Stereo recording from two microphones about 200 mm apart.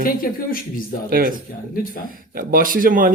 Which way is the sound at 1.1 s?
45° right (ahead or behind).